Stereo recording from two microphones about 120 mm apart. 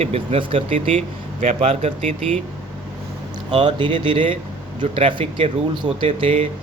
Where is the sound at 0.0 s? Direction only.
60° right (ahead or behind).